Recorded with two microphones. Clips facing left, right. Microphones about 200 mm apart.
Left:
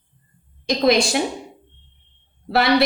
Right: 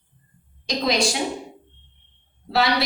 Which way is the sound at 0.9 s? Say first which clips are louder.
Left 6 dB; 55° left (ahead or behind).